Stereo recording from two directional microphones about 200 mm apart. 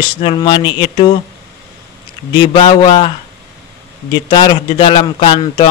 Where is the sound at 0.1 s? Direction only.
25° left (ahead or behind).